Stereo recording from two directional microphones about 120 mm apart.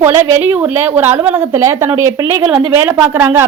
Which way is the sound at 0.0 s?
20° right (ahead or behind).